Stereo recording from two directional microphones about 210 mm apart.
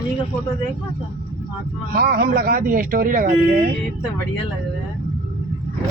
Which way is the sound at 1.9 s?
45° right (ahead or behind).